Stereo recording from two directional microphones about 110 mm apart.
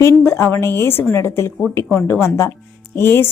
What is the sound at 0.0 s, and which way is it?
A woman's voice, 20° left (ahead or behind).